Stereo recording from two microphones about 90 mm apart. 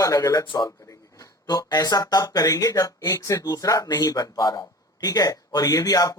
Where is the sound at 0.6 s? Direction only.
35° left (ahead or behind).